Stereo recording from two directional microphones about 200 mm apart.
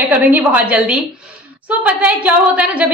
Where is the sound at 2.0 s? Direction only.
5° right (ahead or behind).